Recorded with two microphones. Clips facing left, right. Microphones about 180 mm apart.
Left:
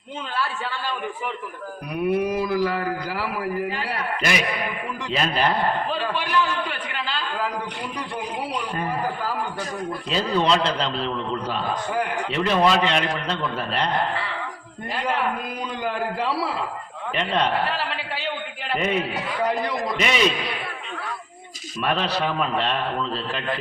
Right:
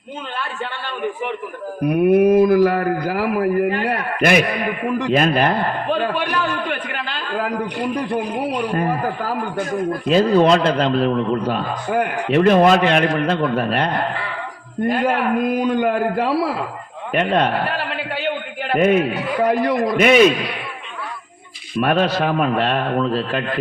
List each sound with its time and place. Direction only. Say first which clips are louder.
1.8 s a man's voice: right 9 dB; 55° right (ahead or behind)
21.8 s a man's voice: right 7 dB; 45° right (ahead or behind)